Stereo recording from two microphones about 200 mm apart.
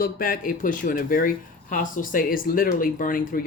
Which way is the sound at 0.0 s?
45° left (ahead or behind).